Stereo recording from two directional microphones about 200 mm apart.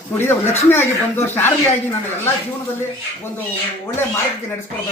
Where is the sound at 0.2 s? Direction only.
10° left (ahead or behind).